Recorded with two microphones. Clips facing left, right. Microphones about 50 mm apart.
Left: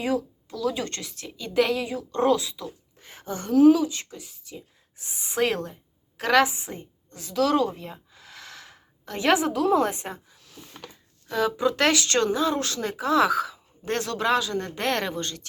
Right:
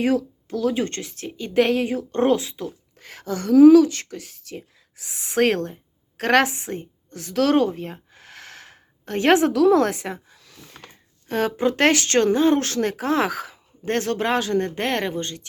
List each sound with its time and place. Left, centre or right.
0.4 s speech: right
3.0 s a woman's voice: right
7.7 s a sound: right
9.5 s speech: right
11.3 s speech: right
14.8 s speech: right